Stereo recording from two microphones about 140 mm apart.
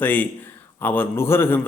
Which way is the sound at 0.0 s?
15° left (ahead or behind).